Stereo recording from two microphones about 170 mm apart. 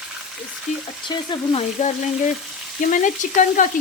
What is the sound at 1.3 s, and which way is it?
Frying, 40° left (ahead or behind).